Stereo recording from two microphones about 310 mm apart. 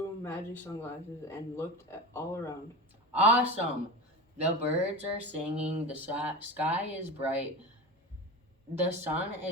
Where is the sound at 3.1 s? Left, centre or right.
Centre.